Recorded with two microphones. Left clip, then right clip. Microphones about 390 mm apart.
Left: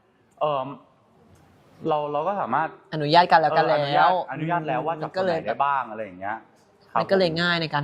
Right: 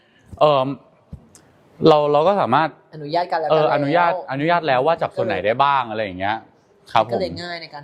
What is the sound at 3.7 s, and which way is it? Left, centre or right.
Speech, right.